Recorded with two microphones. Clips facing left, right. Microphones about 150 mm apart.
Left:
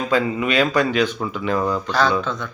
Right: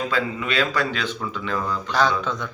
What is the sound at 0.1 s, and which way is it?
Speech, 15° left (ahead or behind).